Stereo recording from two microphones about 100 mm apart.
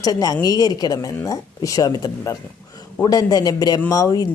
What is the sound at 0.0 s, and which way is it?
Speech, 40° left (ahead or behind).